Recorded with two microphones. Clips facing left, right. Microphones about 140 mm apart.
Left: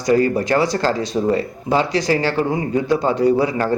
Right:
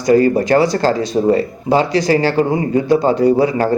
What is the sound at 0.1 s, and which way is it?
Speech, 40° right (ahead or behind).